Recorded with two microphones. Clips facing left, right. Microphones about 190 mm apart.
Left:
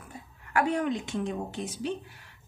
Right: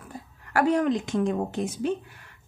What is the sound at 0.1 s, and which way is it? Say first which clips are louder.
A woman's voice: right 2 dB; 40° right (ahead or behind).